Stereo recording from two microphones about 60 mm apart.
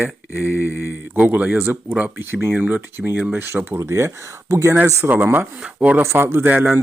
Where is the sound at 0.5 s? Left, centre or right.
Left.